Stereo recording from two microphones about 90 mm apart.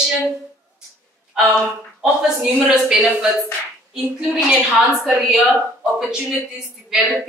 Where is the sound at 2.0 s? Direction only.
5° right (ahead or behind).